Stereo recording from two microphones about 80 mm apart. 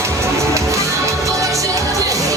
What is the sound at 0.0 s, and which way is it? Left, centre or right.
Music, right.